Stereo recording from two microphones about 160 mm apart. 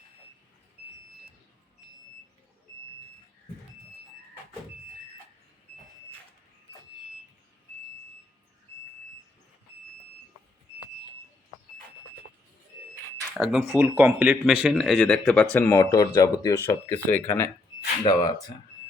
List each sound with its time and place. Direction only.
13.3 s speech: centre (ahead or behind)
14.8 s speech: 5° left (ahead or behind); by 18.3 s 25° left (ahead or behind)